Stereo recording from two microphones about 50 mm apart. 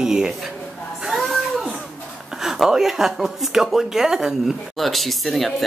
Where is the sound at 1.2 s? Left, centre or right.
Centre.